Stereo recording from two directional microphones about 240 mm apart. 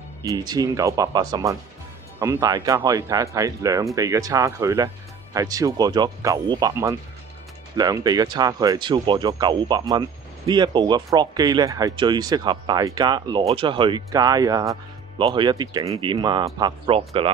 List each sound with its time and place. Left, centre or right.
0.2 s speech: centre